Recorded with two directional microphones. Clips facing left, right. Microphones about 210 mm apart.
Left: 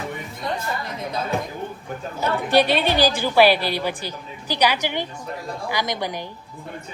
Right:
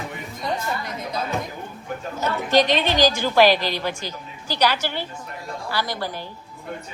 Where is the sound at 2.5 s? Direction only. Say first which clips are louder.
Even; 10° left (ahead or behind).